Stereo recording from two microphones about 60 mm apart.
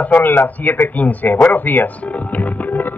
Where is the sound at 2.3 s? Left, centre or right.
Left.